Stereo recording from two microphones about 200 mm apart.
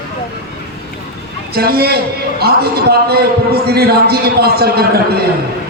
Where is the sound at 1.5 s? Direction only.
50° right (ahead or behind).